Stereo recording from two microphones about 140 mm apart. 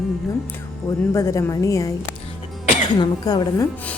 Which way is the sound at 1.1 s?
20° left (ahead or behind).